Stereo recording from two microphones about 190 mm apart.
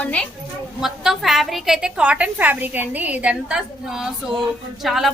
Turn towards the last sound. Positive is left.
turn(degrees=0)  # may be behind; listen again after turning